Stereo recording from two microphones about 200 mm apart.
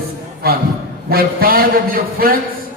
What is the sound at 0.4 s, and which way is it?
Speech, 50° right (ahead or behind).